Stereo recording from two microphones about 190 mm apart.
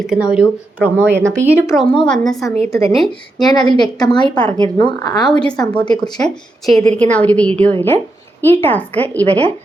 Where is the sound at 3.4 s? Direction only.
20° left (ahead or behind).